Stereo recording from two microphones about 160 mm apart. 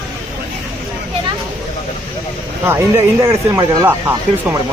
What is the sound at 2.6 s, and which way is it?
Speech, 15° right (ahead or behind).